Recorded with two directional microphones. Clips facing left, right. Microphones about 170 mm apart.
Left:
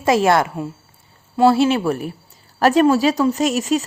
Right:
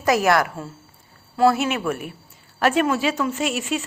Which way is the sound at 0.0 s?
25° left (ahead or behind).